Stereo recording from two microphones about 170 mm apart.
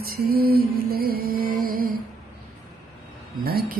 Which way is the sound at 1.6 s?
60° right (ahead or behind).